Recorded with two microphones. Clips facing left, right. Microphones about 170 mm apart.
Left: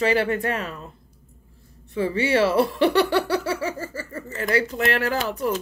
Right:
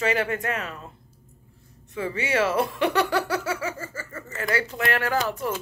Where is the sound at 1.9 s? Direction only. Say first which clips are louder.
Left 5 dB; 30° left (ahead or behind).